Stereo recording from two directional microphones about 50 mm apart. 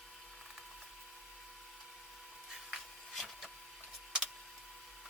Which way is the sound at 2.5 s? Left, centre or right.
Centre.